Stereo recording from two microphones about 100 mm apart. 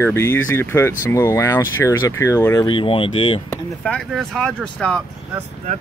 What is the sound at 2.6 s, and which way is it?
Speech, 60° left (ahead or behind).